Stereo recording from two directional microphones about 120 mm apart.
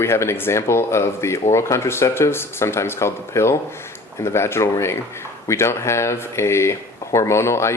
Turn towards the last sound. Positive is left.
turn(degrees=20)  # may be behind; listen again after turning